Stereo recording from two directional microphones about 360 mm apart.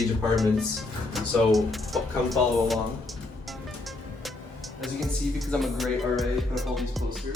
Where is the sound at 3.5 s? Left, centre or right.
Centre.